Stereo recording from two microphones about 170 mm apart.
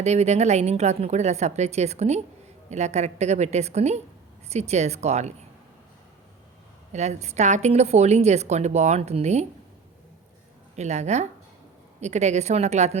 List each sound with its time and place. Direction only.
0.0 s speech: 40° right (ahead or behind)
6.9 s speech: 40° right (ahead or behind)
10.8 s speech: 40° right (ahead or behind)